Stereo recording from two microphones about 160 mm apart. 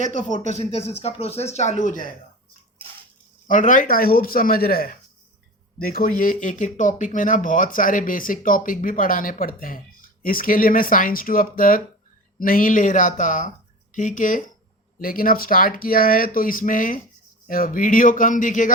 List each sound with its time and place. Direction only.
0.3 s speech: 45° left (ahead or behind)
3.4 s speech: 55° left (ahead or behind)